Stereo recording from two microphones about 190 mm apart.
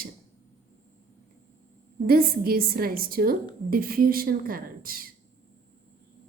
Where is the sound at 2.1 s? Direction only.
50° right (ahead or behind).